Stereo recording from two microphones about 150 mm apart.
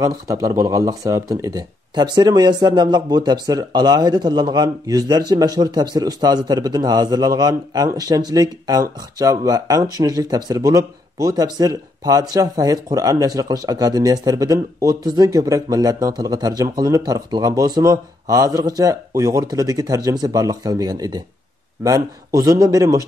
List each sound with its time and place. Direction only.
0.0 s speech: 20° right (ahead or behind)